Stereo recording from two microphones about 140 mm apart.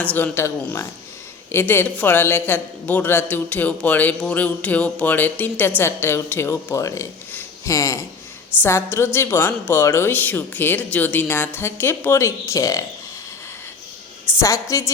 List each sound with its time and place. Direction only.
0.0 s a man's voice: 10° left (ahead or behind)
14.3 s a woman's voice: 20° left (ahead or behind)